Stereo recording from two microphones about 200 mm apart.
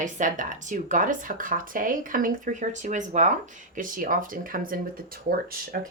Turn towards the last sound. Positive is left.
turn(degrees=-50)  # may be behind; listen again after turning